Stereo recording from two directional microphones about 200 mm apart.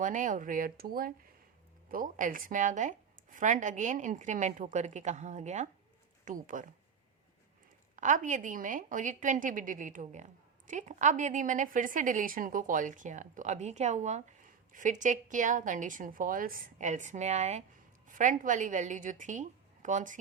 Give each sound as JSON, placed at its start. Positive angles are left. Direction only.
{"t": 0.0, "sound": "a woman's voice", "side_deg": -40}
{"t": 7.9, "sound": "a woman's voice", "side_deg": -40}